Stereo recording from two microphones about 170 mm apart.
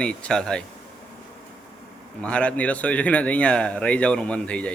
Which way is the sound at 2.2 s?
5° left (ahead or behind).